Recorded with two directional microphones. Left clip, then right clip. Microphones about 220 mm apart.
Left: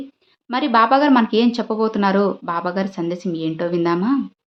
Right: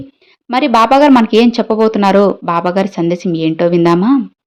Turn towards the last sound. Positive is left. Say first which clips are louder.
# right 8 dB
turn(degrees=-30)  # may be behind; listen again after turning